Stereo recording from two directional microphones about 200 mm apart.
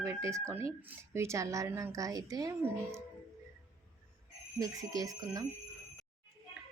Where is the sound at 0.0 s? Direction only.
15° right (ahead or behind).